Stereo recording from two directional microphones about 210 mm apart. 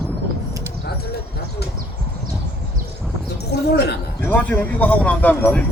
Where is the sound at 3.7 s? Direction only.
50° left (ahead or behind).